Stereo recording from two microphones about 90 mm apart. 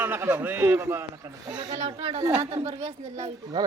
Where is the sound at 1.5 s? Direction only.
50° right (ahead or behind).